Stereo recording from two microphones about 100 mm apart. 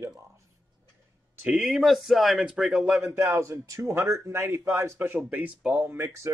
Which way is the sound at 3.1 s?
30° right (ahead or behind).